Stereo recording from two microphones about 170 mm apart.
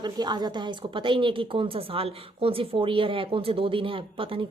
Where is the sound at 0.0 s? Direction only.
25° right (ahead or behind).